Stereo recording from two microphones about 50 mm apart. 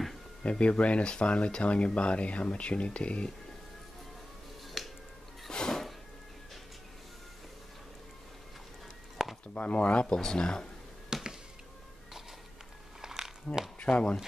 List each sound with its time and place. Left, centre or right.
0.4 s speech: left
4.8 s music: centre
5.5 s a sound: centre
9.5 s speech: left
10.0 s speech: centre
11.1 s music: centre
13.0 s a sound: centre
13.7 s speech: left